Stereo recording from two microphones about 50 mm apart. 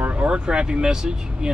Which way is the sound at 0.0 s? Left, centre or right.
Right.